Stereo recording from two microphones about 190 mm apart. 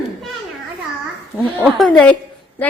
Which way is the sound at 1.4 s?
5° left (ahead or behind).